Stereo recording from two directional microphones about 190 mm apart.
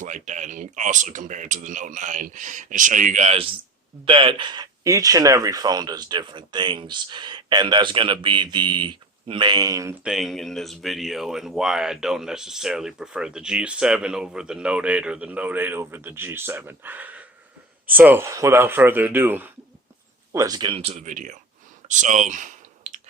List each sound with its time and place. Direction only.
0.0 s speech: 40° right (ahead or behind); by 10.0 s 15° right (ahead or behind)
10.0 s speech: 5° right (ahead or behind); by 21.3 s 40° right (ahead or behind)
21.8 s clicking: 40° right (ahead or behind)